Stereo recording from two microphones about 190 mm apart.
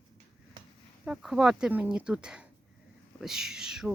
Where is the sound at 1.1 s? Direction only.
5° right (ahead or behind).